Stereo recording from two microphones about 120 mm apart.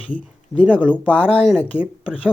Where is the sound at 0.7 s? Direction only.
10° left (ahead or behind).